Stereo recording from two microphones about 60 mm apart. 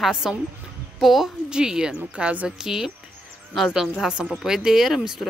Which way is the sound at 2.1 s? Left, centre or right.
Right.